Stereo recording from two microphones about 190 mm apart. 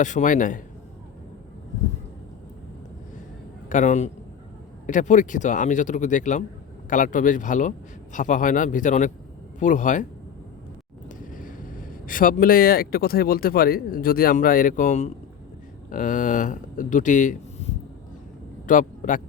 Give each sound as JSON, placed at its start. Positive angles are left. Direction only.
{"t": 0.0, "sound": "a man's voice", "side_deg": 40}
{"t": 3.7, "sound": "a man's voice", "side_deg": 40}
{"t": 11.3, "sound": "speech", "side_deg": 45}